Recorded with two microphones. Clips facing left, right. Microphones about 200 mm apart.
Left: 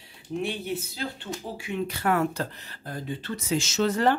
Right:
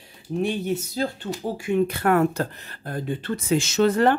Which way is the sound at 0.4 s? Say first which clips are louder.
Right 6 dB; 45° right (ahead or behind).